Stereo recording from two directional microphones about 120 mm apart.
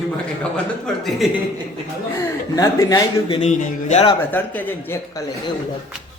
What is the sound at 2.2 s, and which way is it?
Speech, 25° left (ahead or behind).